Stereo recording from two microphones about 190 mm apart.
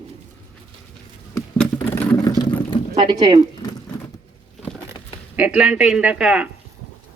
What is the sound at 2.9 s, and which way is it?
Speech, 25° right (ahead or behind).